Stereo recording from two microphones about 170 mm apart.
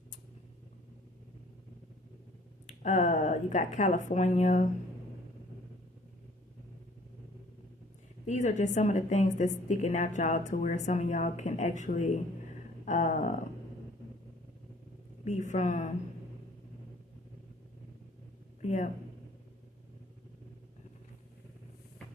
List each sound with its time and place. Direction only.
2.6 s a woman's voice: 45° left (ahead or behind)
8.3 s a woman's voice: 45° left (ahead or behind)
15.2 s a woman's voice: 45° left (ahead or behind)
18.6 s speech: 45° left (ahead or behind)